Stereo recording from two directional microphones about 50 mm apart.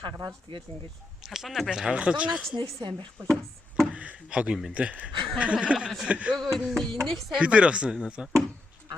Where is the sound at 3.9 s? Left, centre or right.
Right.